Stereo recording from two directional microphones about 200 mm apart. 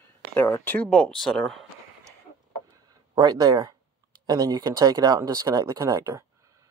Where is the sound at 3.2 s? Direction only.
20° right (ahead or behind).